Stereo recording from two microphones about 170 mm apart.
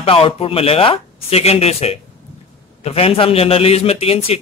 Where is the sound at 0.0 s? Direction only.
35° left (ahead or behind).